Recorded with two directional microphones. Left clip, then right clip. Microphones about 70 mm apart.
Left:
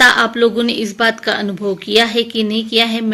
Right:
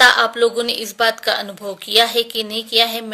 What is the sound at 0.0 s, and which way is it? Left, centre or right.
A woman's voice, right.